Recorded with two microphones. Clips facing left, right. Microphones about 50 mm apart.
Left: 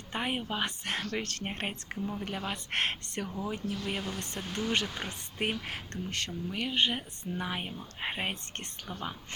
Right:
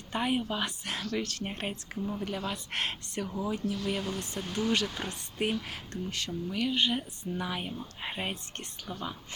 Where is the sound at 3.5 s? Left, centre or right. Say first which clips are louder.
Right 5 dB; left.